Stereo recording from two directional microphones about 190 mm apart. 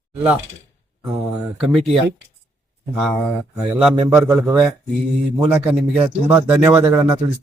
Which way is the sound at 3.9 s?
20° right (ahead or behind).